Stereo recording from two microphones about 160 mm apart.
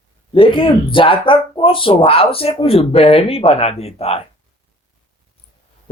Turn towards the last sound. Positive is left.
turn(degrees=40)  # may be behind; listen again after turning